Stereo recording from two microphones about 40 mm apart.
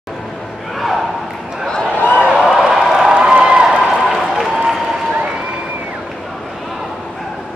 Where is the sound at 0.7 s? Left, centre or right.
Centre.